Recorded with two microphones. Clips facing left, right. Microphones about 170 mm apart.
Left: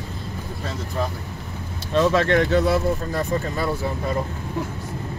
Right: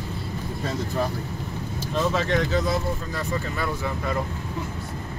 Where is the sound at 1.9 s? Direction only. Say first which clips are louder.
Left 6 dB; 70° left (ahead or behind).